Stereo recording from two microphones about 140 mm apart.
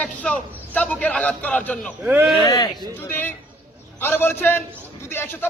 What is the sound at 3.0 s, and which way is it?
Speech, 15° left (ahead or behind).